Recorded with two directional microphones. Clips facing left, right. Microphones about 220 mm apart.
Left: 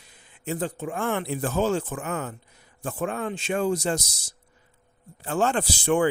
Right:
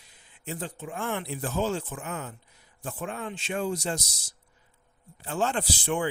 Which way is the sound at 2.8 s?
50° left (ahead or behind).